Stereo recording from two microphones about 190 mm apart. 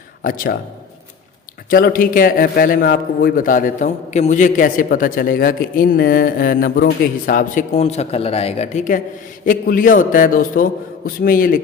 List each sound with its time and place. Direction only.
0.2 s speech: 50° left (ahead or behind)
1.7 s a man's voice: 50° left (ahead or behind)